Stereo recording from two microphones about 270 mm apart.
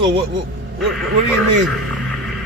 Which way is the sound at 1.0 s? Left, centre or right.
Centre.